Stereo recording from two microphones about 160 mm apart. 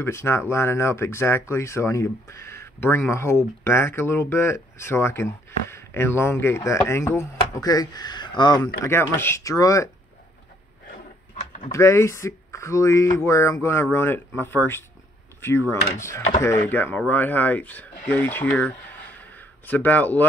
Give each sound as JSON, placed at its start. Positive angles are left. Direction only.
{"t": 0.0, "sound": "speech", "side_deg": 15}
{"t": 8.8, "sound": "speech", "side_deg": 15}
{"t": 11.7, "sound": "speech", "side_deg": 20}